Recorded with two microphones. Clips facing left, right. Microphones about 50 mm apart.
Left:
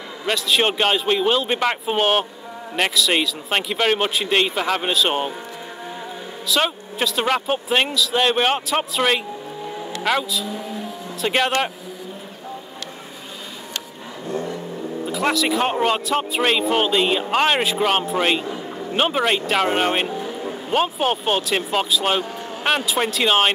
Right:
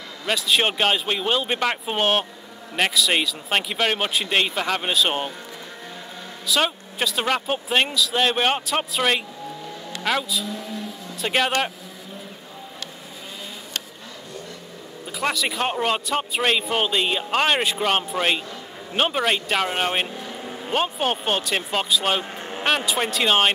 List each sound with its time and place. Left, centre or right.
0.3 s speech: centre
6.4 s speech: centre
11.1 s speech: centre
14.3 s vehicle: left
15.0 s speech: centre